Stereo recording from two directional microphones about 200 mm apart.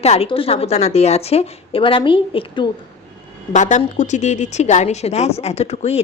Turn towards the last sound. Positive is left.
turn(degrees=30)  # may be behind; listen again after turning